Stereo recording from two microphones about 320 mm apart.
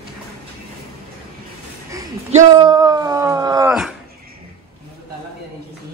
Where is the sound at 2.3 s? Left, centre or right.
Centre.